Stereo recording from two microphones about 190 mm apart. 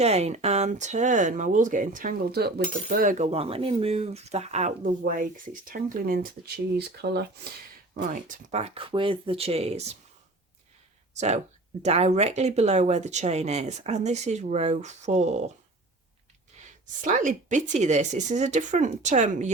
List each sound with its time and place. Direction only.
0.0 s speech: 35° right (ahead or behind); by 7.3 s 60° right (ahead or behind)
8.1 s speech: 40° right (ahead or behind)
11.8 s speech: 35° right (ahead or behind)
16.5 s a sound: 35° right (ahead or behind)
17.0 s speech: 40° right (ahead or behind)